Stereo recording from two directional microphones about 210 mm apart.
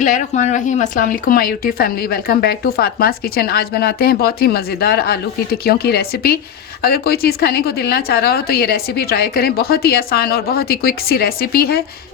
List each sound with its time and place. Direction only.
0.0 s speech: 35° left (ahead or behind)